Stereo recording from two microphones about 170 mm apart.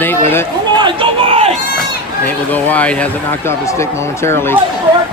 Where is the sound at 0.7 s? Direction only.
30° right (ahead or behind).